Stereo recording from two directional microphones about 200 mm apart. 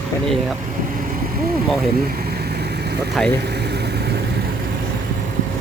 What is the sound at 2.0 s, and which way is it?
Vehicle, 50° right (ahead or behind).